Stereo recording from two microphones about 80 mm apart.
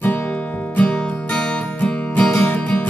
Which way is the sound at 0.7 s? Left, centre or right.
Centre.